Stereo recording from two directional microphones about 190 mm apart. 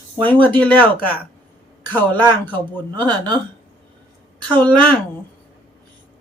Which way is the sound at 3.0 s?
20° right (ahead or behind).